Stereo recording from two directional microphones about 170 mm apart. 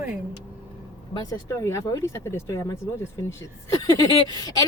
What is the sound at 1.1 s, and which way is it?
Speech, 20° left (ahead or behind).